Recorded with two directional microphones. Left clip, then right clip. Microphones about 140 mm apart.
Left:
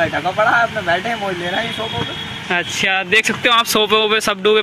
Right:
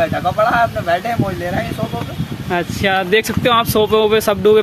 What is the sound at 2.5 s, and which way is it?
Speech, 15° right (ahead or behind).